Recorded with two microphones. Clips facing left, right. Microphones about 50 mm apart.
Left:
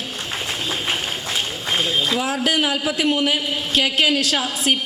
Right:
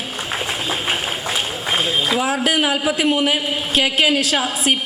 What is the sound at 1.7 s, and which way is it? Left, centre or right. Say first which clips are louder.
A man's voice: right 2 dB; centre.